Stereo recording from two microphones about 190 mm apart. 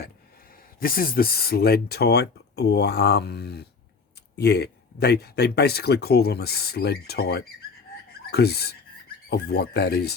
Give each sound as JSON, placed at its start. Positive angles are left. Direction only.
{"t": 0.8, "sound": "speech", "side_deg": 50}